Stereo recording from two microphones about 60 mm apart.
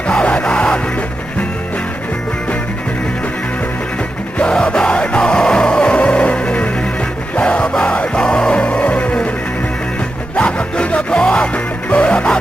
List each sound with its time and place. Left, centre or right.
0.1 s music: centre
4.4 s music: centre
10.3 s music: centre